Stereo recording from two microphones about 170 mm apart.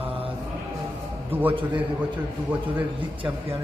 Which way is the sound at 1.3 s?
10° right (ahead or behind).